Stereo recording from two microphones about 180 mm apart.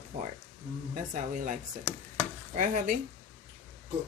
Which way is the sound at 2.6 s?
45° right (ahead or behind).